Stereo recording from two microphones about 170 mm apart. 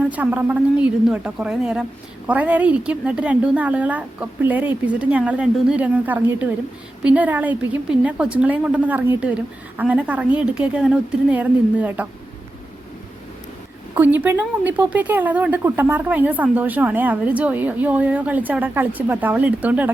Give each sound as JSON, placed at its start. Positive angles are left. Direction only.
{"t": 0.0, "sound": "a woman's voice", "side_deg": -10}
{"t": 13.9, "sound": "a woman's voice", "side_deg": -10}